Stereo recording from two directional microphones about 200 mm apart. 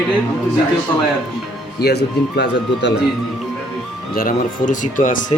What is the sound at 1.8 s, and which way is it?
Speech, 55° left (ahead or behind).